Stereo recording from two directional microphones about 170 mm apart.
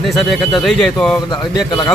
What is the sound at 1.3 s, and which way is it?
Speech, 25° left (ahead or behind).